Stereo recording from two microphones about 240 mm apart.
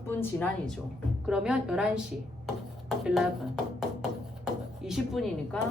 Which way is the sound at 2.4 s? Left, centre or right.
Centre.